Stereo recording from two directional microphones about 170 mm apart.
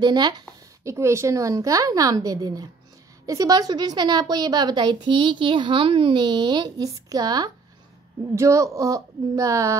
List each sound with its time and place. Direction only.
0.0 s a woman's voice: 25° right (ahead or behind)